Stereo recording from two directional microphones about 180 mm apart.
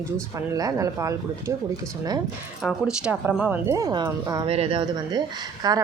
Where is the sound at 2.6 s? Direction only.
Centre (ahead or behind).